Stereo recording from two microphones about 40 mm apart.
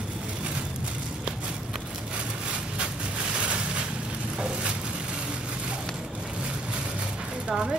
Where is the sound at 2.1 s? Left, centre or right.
Right.